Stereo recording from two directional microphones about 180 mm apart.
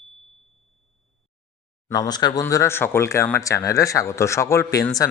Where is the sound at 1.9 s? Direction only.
20° left (ahead or behind).